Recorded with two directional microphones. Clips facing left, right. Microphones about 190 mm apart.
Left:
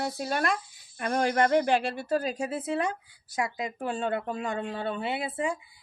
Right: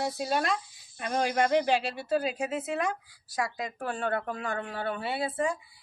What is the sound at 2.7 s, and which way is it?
A woman's voice, 30° left (ahead or behind).